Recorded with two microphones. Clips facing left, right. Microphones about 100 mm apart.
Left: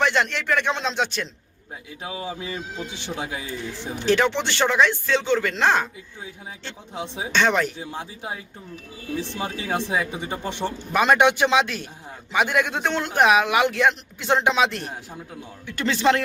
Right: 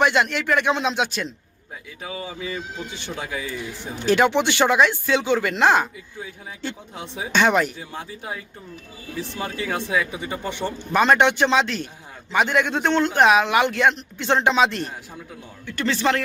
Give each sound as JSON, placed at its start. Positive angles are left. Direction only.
{"t": 0.0, "sound": "speech", "side_deg": -10}
{"t": 2.0, "sound": "speech", "side_deg": 5}
{"t": 3.2, "sound": "speech", "side_deg": 20}
{"t": 3.6, "sound": "speech", "side_deg": -10}
{"t": 6.9, "sound": "speech", "side_deg": 20}
{"t": 7.3, "sound": "speech", "side_deg": -10}
{"t": 7.8, "sound": "speech", "side_deg": 20}
{"t": 9.6, "sound": "speech", "side_deg": 25}
{"t": 10.6, "sound": "a man's voice", "side_deg": 5}
{"t": 15.6, "sound": "speech", "side_deg": 20}